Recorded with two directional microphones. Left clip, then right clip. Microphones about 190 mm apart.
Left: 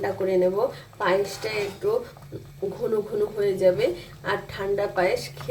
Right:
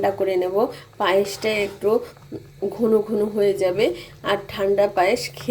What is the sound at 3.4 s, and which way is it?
A woman's voice, 45° right (ahead or behind).